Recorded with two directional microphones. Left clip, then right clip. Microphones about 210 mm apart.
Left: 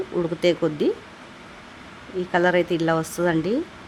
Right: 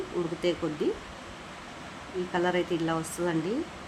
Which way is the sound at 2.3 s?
30° left (ahead or behind).